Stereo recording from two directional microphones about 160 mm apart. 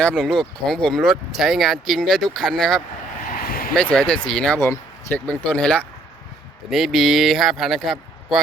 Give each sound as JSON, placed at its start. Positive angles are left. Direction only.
{"t": 0.0, "sound": "speech", "side_deg": 5}
{"t": 3.2, "sound": "a sound", "side_deg": 65}
{"t": 3.8, "sound": "speech", "side_deg": 5}
{"t": 4.6, "sound": "speech", "side_deg": 15}